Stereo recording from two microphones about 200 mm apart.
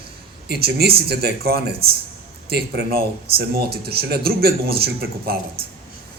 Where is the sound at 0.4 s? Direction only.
50° right (ahead or behind).